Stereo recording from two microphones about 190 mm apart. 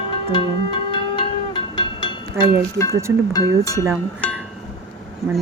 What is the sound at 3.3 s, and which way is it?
Speech, 20° left (ahead or behind).